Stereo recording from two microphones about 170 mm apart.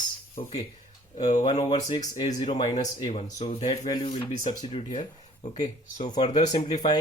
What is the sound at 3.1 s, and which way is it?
Speech, 45° left (ahead or behind).